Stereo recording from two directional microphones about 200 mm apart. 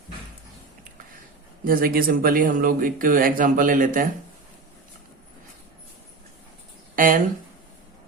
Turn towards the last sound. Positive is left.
turn(degrees=-45)  # may be behind; listen again after turning